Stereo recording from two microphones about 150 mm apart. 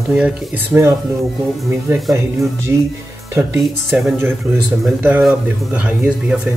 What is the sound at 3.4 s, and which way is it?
Speech, 20° right (ahead or behind).